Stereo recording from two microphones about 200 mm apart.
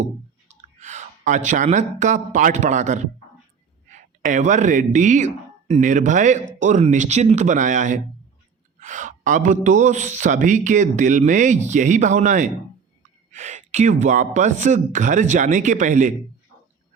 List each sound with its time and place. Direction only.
0.6 s speech: 35° right (ahead or behind)